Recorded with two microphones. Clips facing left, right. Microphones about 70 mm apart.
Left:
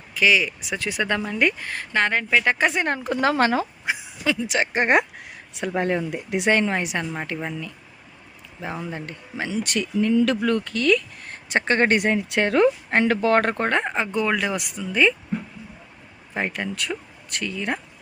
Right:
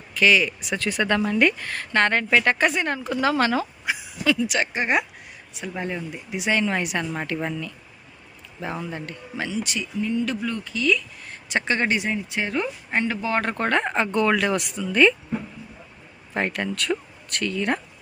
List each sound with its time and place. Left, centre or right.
0.1 s speech: centre
2.0 s speech: centre
2.7 s speech: left
4.8 s speech: left
5.5 s speech: left
6.7 s speech: left
7.0 s speech: centre
8.9 s speech: left
9.5 s speech: left
11.4 s speech: left
13.6 s speech: left
13.8 s speech: centre
16.5 s speech: centre